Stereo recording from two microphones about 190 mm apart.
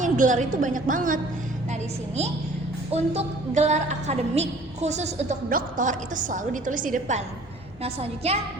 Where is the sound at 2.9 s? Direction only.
35° right (ahead or behind).